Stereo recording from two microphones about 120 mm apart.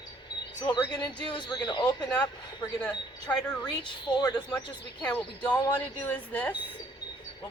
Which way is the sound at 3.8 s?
35° left (ahead or behind).